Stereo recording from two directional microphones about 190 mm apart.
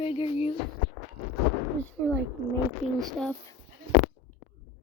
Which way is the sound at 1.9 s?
10° left (ahead or behind).